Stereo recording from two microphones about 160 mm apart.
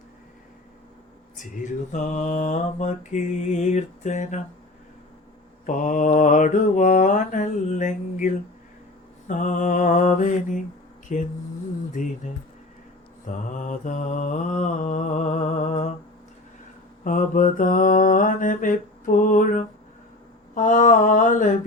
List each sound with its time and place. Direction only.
1.6 s mantra: 50° left (ahead or behind)
5.6 s mantra: 50° left (ahead or behind)
12.2 s mantra: 50° left (ahead or behind)
17.0 s mantra: 55° left (ahead or behind)